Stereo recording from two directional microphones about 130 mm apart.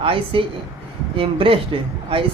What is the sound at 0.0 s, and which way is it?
Speech, 45° right (ahead or behind).